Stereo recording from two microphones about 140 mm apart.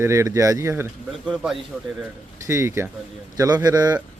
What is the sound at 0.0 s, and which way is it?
Speech, 20° right (ahead or behind).